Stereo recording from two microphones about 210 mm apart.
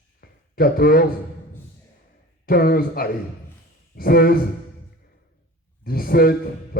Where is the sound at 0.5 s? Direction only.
45° left (ahead or behind).